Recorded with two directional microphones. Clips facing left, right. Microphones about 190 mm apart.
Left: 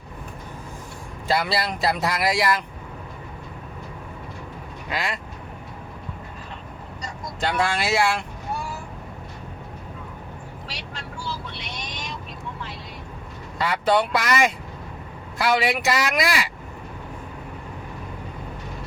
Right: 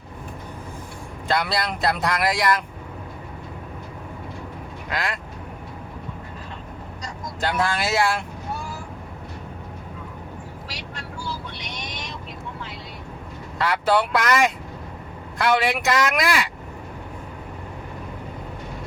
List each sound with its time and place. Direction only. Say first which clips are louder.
1.3 s speech: even; 5° left (ahead or behind)
4.9 s speech: even; centre (ahead or behind)
7.4 s speech: even; centre (ahead or behind)
13.6 s speech: even; centre (ahead or behind)